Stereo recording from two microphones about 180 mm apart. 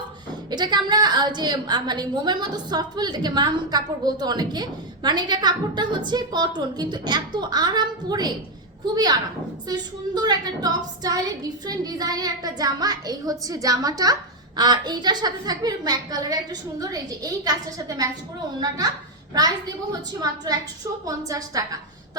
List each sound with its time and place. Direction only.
0.5 s a woman's voice: 25° right (ahead or behind)
9.6 s a woman's voice: 25° right (ahead or behind)
19.9 s a woman's voice: 20° right (ahead or behind)